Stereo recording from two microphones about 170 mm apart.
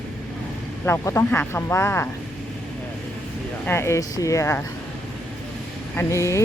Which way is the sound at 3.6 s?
15° left (ahead or behind).